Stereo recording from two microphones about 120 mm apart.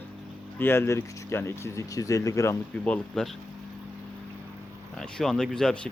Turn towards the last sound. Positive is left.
turn(degrees=5)  # may be behind; listen again after turning